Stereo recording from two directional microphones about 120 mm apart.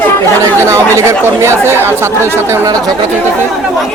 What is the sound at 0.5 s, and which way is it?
Speech, 20° right (ahead or behind).